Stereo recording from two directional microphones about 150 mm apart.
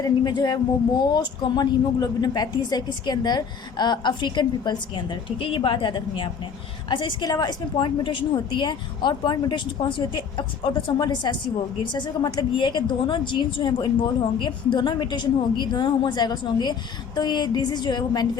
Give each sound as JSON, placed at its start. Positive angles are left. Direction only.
{"t": 0.0, "sound": "a woman's voice", "side_deg": 30}